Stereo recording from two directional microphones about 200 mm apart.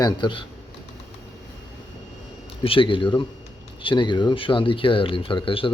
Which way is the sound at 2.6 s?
25° left (ahead or behind).